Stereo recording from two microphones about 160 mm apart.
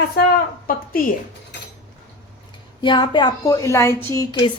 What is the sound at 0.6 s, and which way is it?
Speech, 60° left (ahead or behind).